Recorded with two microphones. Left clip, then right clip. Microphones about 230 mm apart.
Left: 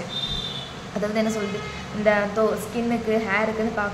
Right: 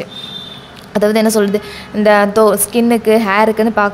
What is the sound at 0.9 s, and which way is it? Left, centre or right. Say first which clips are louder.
A woman's voice: right 13 dB; right.